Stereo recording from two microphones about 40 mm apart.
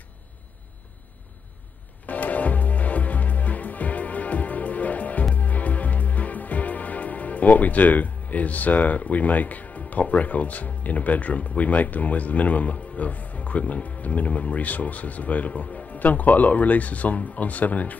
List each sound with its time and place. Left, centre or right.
2.0 s music: left